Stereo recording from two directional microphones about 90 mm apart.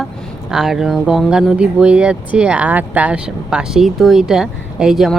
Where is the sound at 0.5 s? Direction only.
5° right (ahead or behind).